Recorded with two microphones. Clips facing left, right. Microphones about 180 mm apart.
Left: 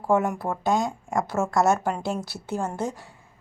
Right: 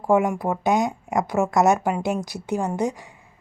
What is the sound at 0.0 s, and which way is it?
A woman's voice, 15° right (ahead or behind).